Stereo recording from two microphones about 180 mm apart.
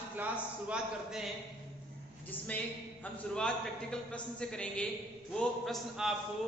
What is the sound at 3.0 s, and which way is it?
Speech, 5° left (ahead or behind).